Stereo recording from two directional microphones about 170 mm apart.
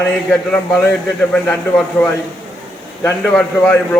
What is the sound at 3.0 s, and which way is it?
Speech, 10° left (ahead or behind).